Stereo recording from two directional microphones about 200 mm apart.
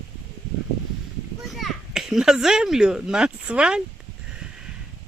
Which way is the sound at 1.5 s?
Centre (ahead or behind).